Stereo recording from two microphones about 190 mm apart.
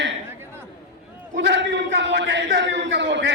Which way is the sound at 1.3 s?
70° right (ahead or behind).